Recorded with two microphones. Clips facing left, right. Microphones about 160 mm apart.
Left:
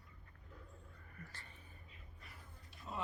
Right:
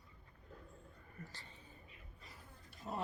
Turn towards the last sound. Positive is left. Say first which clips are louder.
# right 3 dB
turn(degrees=-25)  # may be behind; listen again after turning